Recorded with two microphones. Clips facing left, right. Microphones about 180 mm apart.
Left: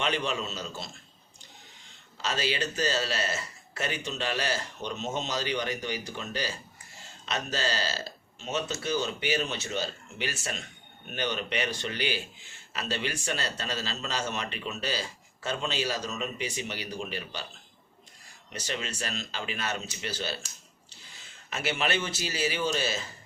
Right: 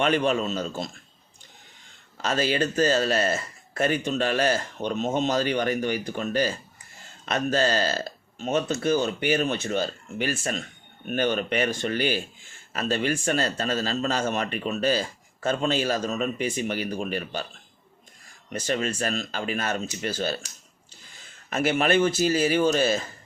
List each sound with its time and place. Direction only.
0.0 s a man's voice: 50° right (ahead or behind)
2.2 s a man's voice: 50° right (ahead or behind)
18.5 s a man's voice: 50° right (ahead or behind)
21.5 s a man's voice: 50° right (ahead or behind)